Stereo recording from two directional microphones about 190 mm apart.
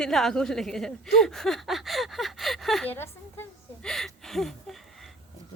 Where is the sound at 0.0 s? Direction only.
Centre (ahead or behind).